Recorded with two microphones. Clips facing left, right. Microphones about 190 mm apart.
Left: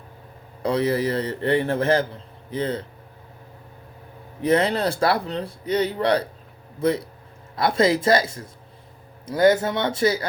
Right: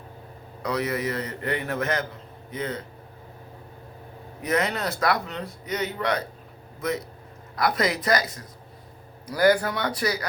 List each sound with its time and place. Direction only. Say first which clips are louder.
0.6 s a man's voice: left 5 dB; 30° left (ahead or behind)
4.4 s a man's voice: left 6 dB; 30° left (ahead or behind)